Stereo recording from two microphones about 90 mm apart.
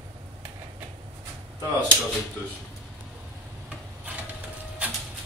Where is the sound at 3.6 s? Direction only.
15° right (ahead or behind).